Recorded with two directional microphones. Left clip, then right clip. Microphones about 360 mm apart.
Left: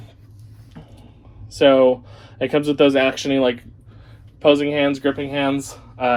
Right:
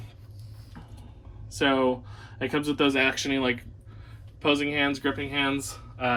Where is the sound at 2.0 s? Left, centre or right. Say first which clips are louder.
Left 8 dB; centre.